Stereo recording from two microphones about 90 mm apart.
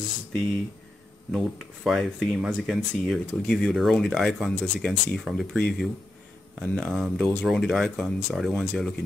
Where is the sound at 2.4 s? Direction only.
10° right (ahead or behind).